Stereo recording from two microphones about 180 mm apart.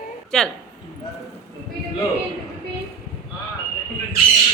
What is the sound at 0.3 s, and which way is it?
Speech, 5° left (ahead or behind).